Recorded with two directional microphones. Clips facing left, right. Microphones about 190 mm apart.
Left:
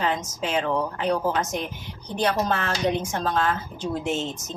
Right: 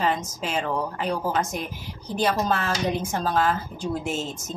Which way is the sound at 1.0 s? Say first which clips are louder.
Left 2 dB; 5° right (ahead or behind).